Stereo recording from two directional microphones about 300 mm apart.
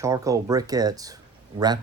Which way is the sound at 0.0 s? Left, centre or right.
Centre.